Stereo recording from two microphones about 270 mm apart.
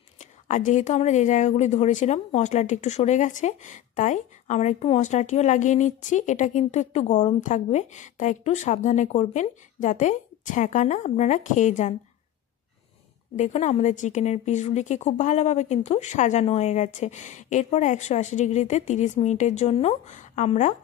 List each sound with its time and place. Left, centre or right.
0.2 s speech: left
13.4 s speech: left